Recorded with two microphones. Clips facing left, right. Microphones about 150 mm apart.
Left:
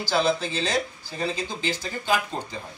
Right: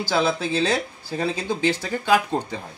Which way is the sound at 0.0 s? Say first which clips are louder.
Right 1 dB; 55° right (ahead or behind).